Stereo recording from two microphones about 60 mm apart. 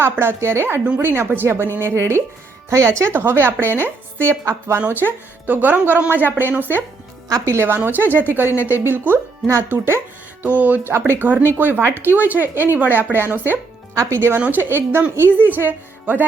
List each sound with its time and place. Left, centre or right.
0.0 s speech: right
2.6 s speech: right
3.1 s speech: right
4.9 s speech: right
10.4 s speech: right
13.9 s speech: right
14.3 s speech: right